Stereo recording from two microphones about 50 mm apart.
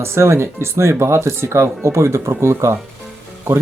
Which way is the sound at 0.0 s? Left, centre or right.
Right.